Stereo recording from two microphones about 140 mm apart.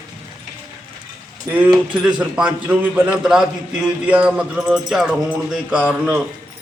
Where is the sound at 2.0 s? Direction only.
10° right (ahead or behind).